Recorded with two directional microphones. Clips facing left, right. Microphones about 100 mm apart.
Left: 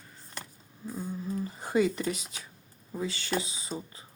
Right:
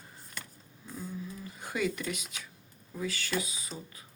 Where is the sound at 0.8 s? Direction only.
35° left (ahead or behind).